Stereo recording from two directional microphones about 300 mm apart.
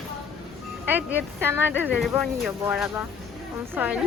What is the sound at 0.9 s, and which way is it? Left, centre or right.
Speech, centre.